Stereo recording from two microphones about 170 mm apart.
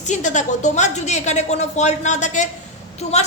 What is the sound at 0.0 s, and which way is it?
A woman's voice, 45° left (ahead or behind).